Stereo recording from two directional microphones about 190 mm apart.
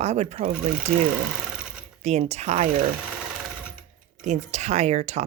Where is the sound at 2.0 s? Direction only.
35° right (ahead or behind).